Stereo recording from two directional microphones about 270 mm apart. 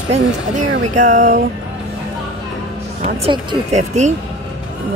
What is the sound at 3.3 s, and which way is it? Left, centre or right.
Speech, right.